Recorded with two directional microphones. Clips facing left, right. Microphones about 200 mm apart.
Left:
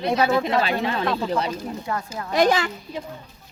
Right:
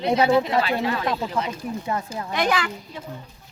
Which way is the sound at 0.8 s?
30° left (ahead or behind).